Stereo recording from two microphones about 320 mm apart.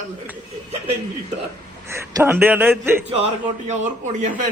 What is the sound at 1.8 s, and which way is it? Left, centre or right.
A man's voice, centre.